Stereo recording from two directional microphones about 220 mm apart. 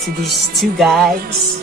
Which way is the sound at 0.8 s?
Centre (ahead or behind).